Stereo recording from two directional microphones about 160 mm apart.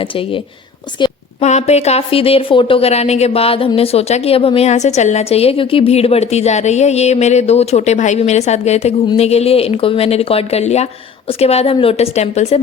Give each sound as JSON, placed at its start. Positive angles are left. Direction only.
{"t": 1.4, "sound": "a woman's voice", "side_deg": 45}